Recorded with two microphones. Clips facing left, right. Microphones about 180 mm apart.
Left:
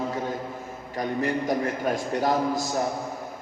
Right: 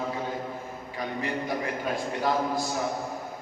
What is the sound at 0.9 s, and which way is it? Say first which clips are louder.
A man's voice: left 5 dB; 45° left (ahead or behind).